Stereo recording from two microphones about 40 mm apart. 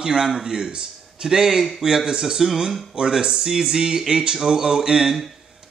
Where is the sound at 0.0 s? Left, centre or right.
Centre.